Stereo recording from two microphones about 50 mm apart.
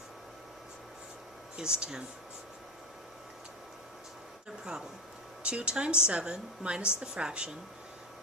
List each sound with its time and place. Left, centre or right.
1.5 s a woman's voice: centre
5.4 s a woman's voice: right